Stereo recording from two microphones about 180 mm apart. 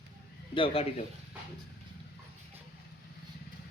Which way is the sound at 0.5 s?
30° left (ahead or behind).